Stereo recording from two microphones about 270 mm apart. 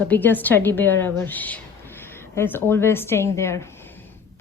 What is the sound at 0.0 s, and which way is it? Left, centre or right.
A woman's voice, centre.